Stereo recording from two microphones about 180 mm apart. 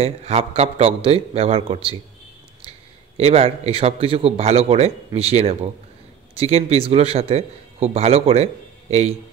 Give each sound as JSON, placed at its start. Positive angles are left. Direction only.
{"t": 0.0, "sound": "a man's voice", "side_deg": -35}
{"t": 3.2, "sound": "a man's voice", "side_deg": -35}